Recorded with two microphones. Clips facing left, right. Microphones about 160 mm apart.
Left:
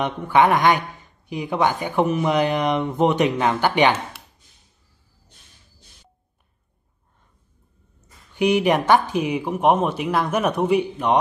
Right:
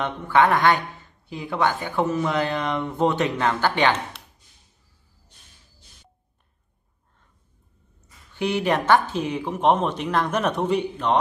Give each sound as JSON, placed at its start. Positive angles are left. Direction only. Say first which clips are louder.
{"t": 0.0, "sound": "a man's voice", "louder": "left 2 dB", "side_deg": 15}
{"t": 8.4, "sound": "a man's voice", "louder": "left 4 dB", "side_deg": 15}